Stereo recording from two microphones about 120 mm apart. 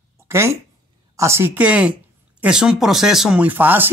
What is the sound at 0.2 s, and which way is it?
Speech, 20° right (ahead or behind).